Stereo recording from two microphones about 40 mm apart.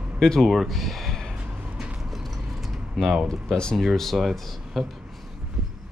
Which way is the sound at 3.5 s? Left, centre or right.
Centre.